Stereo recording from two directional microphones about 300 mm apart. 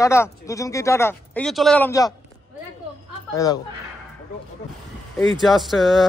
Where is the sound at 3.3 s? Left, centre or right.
Centre.